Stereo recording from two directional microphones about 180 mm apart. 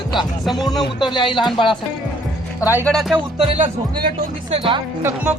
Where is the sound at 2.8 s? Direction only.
Centre (ahead or behind).